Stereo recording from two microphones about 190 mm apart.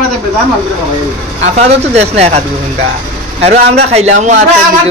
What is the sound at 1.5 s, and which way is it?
Speech, 35° right (ahead or behind).